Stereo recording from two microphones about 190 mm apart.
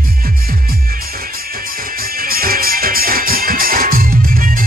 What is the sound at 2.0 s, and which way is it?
Music, 50° right (ahead or behind).